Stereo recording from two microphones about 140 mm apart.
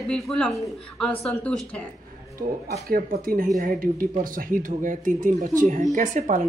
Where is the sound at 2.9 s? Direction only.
90° right.